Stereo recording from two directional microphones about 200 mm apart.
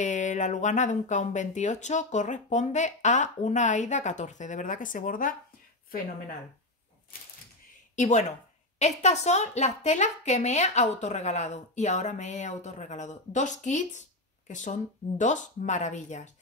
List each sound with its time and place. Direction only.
0.0 s a woman's voice: 40° left (ahead or behind)
7.9 s a woman's voice: 35° left (ahead or behind)